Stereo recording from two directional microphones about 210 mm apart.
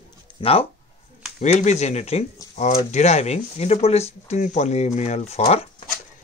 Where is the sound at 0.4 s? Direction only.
25° left (ahead or behind).